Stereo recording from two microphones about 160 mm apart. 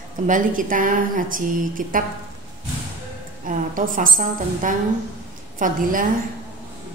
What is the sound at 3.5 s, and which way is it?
A woman's voice, 55° right (ahead or behind).